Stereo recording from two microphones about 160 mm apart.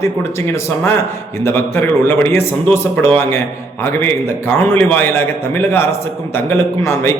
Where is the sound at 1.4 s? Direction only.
15° left (ahead or behind).